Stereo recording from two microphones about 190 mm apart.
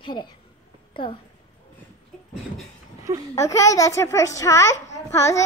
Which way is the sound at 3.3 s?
15° left (ahead or behind).